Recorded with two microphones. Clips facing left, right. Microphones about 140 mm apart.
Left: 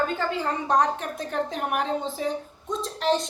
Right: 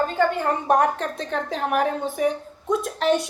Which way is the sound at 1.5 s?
90° right.